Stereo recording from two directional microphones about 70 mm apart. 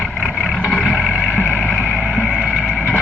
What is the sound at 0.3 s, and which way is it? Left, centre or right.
Vehicle, centre.